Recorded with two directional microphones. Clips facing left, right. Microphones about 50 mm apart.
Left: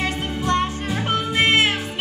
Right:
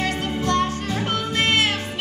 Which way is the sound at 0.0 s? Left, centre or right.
Centre.